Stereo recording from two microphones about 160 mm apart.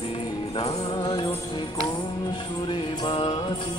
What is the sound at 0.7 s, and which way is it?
Music, 30° left (ahead or behind).